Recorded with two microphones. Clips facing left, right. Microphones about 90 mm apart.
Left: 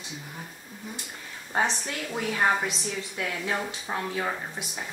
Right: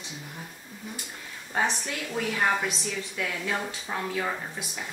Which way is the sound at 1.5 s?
20° left (ahead or behind).